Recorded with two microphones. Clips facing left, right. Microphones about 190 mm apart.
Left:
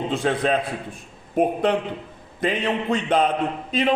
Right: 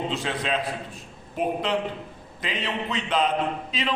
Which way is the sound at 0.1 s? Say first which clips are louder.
Left 6 dB; 50° left (ahead or behind).